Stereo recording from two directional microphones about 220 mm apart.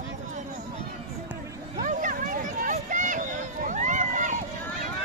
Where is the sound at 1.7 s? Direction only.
35° right (ahead or behind).